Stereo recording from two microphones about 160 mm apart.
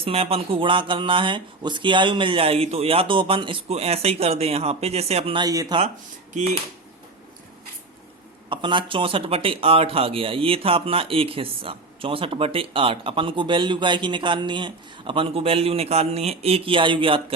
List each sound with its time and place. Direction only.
0.0 s speech: 40° right (ahead or behind)
8.4 s speech: 30° right (ahead or behind)